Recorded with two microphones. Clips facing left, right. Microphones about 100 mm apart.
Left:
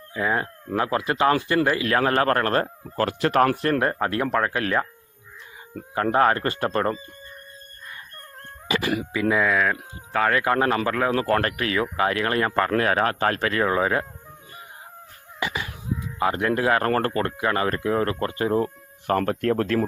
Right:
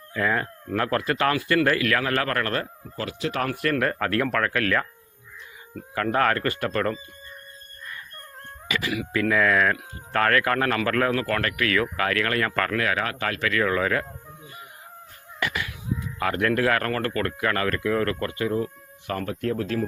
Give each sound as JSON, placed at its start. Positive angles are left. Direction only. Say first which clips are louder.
{"t": 0.1, "sound": "speech", "louder": "even", "side_deg": 15}
{"t": 3.5, "sound": "speech", "louder": "left 2 dB", "side_deg": 30}
{"t": 5.9, "sound": "speech", "louder": "left 3 dB", "side_deg": 25}
{"t": 8.6, "sound": "cat", "louder": "left 4 dB", "side_deg": 30}
{"t": 9.4, "sound": "speech", "louder": "right 1 dB", "side_deg": 5}
{"t": 11.1, "sound": "speech", "louder": "left 3 dB", "side_deg": 30}
{"t": 15.4, "sound": "a sound", "louder": "even", "side_deg": 20}
{"t": 16.2, "sound": "speech", "louder": "left 1 dB", "side_deg": 20}
{"t": 16.9, "sound": "speech", "louder": "left 3 dB", "side_deg": 35}